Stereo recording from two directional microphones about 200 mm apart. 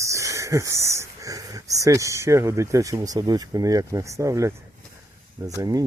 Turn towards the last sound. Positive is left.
turn(degrees=-20)  # may be behind; listen again after turning